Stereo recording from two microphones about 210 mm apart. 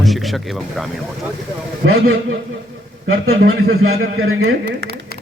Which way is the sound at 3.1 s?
80° right.